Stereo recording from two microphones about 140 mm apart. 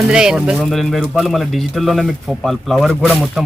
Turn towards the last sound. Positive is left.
turn(degrees=0)  # may be behind; listen again after turning